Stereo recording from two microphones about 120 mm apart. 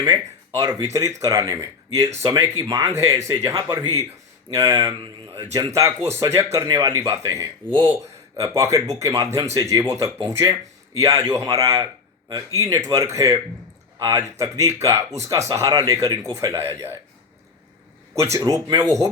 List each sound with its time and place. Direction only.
0.0 s speech: 30° right (ahead or behind)
18.1 s speech: 25° right (ahead or behind)
18.3 s speech: 35° right (ahead or behind)